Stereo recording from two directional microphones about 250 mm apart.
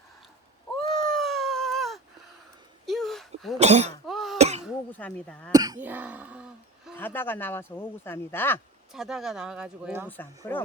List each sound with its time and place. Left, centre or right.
1.0 s dog: centre
2.8 s a sound: centre
3.6 s speech: right
4.0 s cough: centre
4.4 s throat clearing: right
4.6 s a sound: centre
5.5 s throat clearing: centre
6.9 s speech: centre
8.9 s speech: centre
10.1 s speech: centre